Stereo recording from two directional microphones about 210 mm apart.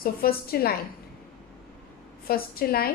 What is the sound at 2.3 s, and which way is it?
Speech, 45° left (ahead or behind).